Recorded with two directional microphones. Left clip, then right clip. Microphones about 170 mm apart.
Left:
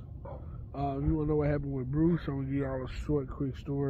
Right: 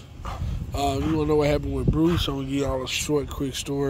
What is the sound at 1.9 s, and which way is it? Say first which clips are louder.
Speech: right 7 dB; 20° right (ahead or behind).